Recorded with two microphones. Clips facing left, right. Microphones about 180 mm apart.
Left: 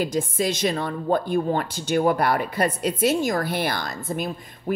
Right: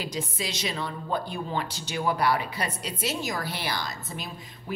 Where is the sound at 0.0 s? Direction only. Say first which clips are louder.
Left 9 dB; 50° left (ahead or behind).